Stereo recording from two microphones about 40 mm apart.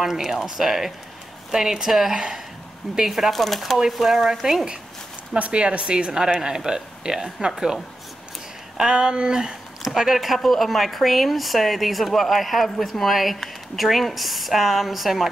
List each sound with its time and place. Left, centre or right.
0.0 s speech: centre
5.4 s speech: right; by 15.2 s centre